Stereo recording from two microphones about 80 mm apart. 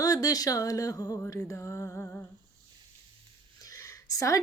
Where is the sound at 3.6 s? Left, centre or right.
Left.